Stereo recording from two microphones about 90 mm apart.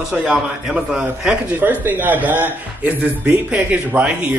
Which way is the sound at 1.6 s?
20° right (ahead or behind).